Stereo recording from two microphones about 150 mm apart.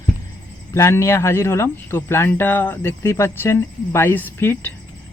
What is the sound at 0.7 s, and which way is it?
Speech, 20° left (ahead or behind).